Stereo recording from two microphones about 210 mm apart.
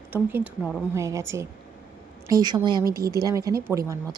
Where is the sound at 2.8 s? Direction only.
45° right (ahead or behind).